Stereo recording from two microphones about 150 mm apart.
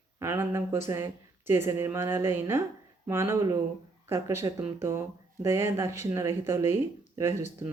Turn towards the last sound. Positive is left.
turn(degrees=-15)  # may be behind; listen again after turning